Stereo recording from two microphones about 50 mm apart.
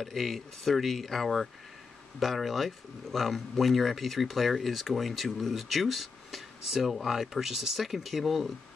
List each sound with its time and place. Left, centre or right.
0.0 s speech: centre